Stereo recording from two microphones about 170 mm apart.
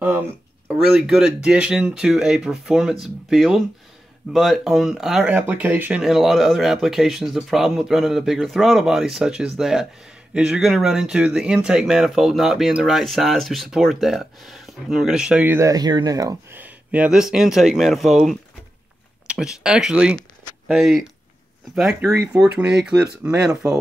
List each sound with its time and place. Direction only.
0.9 s speech: 5° right (ahead or behind)
23.2 s speech: 15° right (ahead or behind)